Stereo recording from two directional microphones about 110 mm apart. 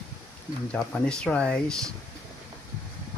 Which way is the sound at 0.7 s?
10° left (ahead or behind).